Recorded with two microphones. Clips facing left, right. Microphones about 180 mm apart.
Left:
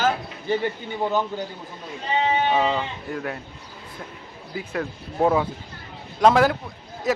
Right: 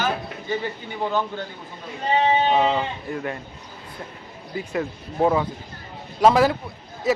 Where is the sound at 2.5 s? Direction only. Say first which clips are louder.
Right 2 dB; 5° right (ahead or behind).